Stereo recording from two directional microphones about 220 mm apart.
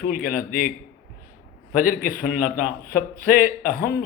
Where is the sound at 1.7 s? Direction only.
40° left (ahead or behind).